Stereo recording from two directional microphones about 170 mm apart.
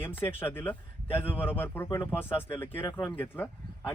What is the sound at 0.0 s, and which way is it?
Speech, 10° left (ahead or behind).